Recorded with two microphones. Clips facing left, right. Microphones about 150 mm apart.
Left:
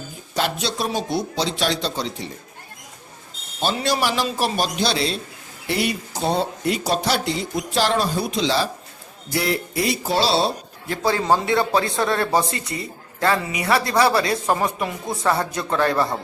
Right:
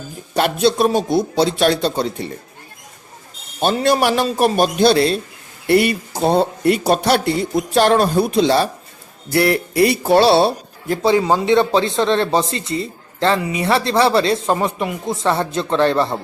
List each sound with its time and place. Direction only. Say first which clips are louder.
0.3 s speech: right 8 dB; 55° right (ahead or behind)
3.6 s a man's voice: right 6 dB; 55° right (ahead or behind)
11.0 s speech: right 4 dB; 20° right (ahead or behind)